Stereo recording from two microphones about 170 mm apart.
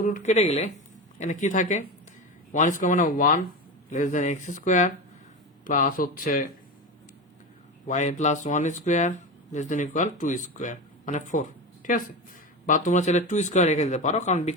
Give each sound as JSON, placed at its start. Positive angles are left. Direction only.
{"t": 0.0, "sound": "speech", "side_deg": 50}
{"t": 7.9, "sound": "speech", "side_deg": 45}